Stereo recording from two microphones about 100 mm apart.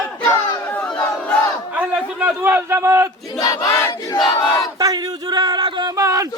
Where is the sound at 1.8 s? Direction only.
15° right (ahead or behind).